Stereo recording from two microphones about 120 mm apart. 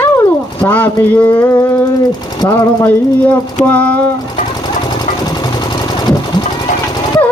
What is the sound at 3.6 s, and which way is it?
Speech, 10° left (ahead or behind).